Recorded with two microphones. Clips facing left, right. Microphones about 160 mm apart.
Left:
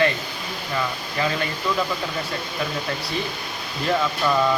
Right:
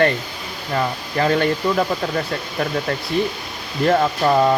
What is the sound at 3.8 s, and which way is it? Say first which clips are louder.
Speech: right 6 dB; 45° right (ahead or behind).